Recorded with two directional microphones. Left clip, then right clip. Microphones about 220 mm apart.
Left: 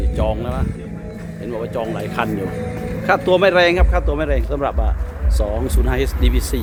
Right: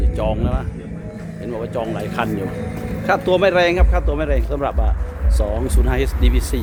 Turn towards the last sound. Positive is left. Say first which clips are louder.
# left 1 dB
turn(degrees=5)  # may be behind; listen again after turning